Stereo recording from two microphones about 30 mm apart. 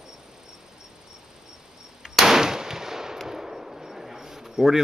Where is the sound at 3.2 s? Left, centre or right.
Centre.